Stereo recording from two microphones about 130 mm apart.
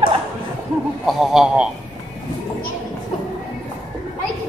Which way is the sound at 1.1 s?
Centre (ahead or behind).